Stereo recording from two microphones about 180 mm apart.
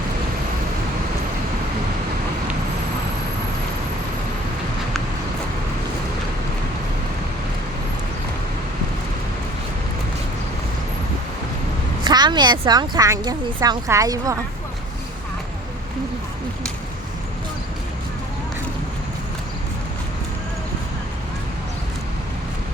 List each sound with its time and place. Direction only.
12.0 s a woman's voice: 25° right (ahead or behind)